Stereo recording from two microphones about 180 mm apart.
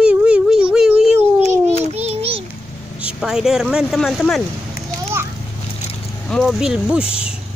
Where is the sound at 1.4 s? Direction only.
40° right (ahead or behind).